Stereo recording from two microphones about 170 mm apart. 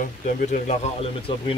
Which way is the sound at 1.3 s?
30° left (ahead or behind).